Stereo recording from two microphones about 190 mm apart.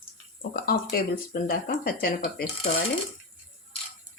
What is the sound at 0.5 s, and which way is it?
Speech, 55° left (ahead or behind).